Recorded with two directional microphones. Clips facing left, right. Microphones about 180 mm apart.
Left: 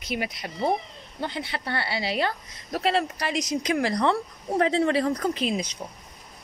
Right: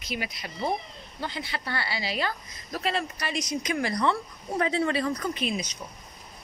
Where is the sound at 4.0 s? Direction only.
35° left (ahead or behind).